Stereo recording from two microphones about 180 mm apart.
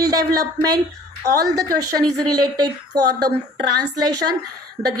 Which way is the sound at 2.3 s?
20° right (ahead or behind).